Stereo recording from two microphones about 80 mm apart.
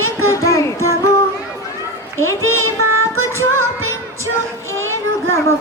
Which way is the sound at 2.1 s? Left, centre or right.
Left.